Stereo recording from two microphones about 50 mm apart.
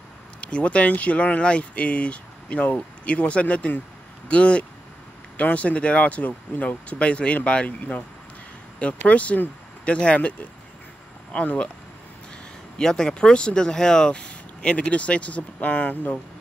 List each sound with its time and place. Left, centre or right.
0.4 s speech: left
11.3 s speech: left
12.7 s speech: centre; by 16.2 s left